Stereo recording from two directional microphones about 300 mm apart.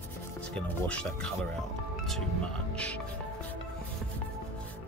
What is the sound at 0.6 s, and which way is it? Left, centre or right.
Speech, centre.